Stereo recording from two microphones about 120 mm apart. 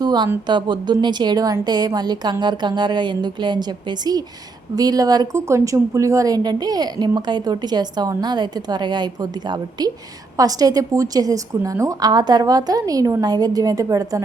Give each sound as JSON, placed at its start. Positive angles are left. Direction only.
{"t": 0.0, "sound": "a sound", "side_deg": -35}
{"t": 0.4, "sound": "speech", "side_deg": -40}
{"t": 4.7, "sound": "speech", "side_deg": -30}
{"t": 10.3, "sound": "speech", "side_deg": -30}